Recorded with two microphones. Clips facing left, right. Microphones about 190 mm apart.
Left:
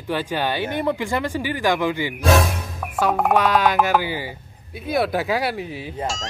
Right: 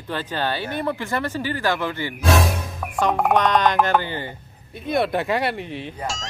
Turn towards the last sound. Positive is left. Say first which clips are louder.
# left 2 dB
turn(degrees=0)  # may be behind; listen again after turning